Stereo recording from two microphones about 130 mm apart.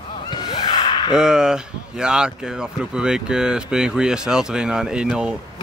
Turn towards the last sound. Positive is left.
turn(degrees=-5)  # may be behind; listen again after turning